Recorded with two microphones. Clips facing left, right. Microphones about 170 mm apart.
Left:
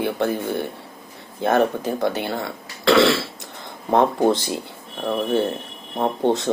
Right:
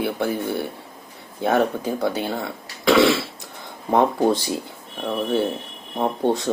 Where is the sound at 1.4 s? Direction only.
10° right (ahead or behind).